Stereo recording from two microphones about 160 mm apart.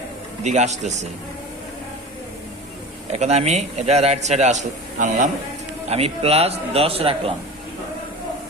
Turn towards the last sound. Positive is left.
turn(degrees=-35)  # may be behind; listen again after turning